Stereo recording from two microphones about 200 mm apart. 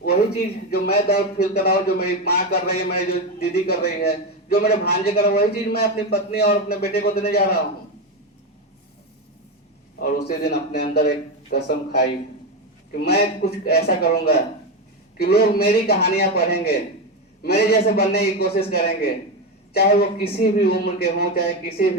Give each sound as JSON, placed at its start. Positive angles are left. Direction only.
{"t": 0.7, "sound": "speech", "side_deg": 50}
{"t": 10.0, "sound": "speech", "side_deg": 50}